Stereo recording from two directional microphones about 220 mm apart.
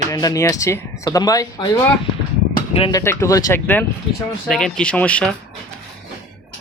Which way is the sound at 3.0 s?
10° left (ahead or behind).